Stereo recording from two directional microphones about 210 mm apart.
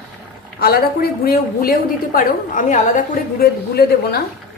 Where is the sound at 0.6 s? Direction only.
45° left (ahead or behind).